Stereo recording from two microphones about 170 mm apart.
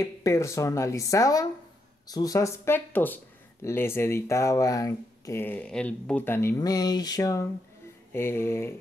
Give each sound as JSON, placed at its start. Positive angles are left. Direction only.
{"t": 0.0, "sound": "speech", "side_deg": 15}